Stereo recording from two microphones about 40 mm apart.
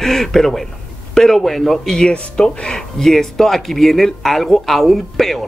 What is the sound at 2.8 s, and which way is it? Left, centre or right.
Speech, centre.